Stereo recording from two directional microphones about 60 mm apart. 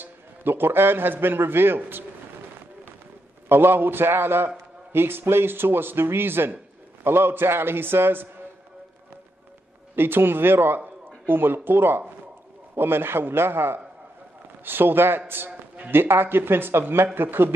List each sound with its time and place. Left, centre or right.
0.0 s a man's voice: right
3.4 s speech: right
9.9 s speech: right